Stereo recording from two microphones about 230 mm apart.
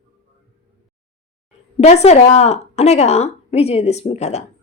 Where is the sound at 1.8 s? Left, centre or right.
Left.